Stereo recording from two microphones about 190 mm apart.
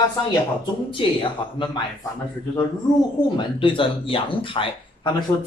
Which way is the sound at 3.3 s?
25° left (ahead or behind).